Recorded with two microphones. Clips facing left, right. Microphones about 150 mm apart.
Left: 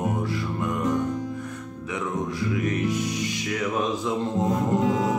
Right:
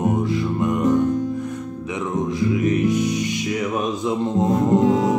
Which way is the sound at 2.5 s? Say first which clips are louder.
Right 6 dB; 20° right (ahead or behind).